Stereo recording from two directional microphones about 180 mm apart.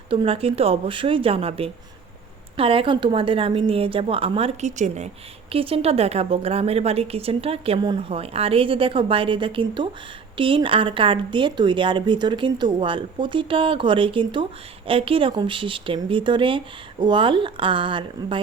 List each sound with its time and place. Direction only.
0.1 s a woman's voice: 30° right (ahead or behind)